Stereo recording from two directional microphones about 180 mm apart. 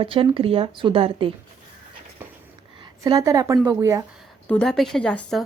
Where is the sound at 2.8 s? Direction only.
20° right (ahead or behind).